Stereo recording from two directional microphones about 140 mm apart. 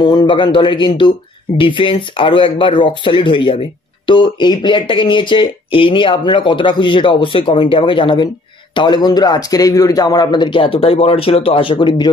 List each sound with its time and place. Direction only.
0.0 s speech: 30° left (ahead or behind)